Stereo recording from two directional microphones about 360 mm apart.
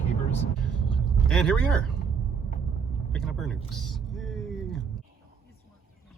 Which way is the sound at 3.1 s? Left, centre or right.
Centre.